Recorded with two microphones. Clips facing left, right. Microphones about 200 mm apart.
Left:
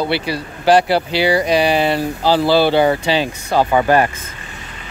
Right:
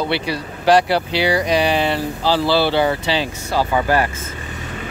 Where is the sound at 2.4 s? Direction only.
15° left (ahead or behind).